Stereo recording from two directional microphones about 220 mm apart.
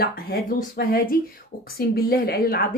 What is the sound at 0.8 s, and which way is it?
A woman's voice, 40° left (ahead or behind).